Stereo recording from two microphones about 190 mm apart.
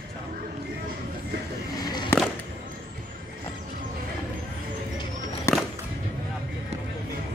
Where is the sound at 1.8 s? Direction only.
20° left (ahead or behind).